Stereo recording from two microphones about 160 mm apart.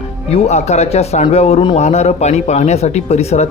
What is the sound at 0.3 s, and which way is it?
Speech, 40° left (ahead or behind).